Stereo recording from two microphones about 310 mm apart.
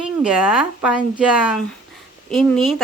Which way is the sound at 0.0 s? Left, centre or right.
Centre.